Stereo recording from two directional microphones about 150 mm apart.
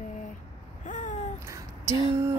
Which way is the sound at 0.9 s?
60° left (ahead or behind).